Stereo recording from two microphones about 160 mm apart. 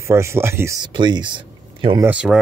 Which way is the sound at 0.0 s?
15° right (ahead or behind).